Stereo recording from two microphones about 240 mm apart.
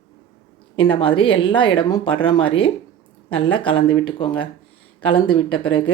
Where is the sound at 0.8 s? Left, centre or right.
Left.